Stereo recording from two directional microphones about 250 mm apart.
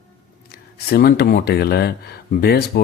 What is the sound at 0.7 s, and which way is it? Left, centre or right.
Speech, left.